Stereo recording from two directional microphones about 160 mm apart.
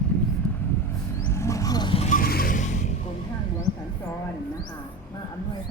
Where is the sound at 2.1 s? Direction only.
65° left (ahead or behind); by 2.8 s 50° left (ahead or behind).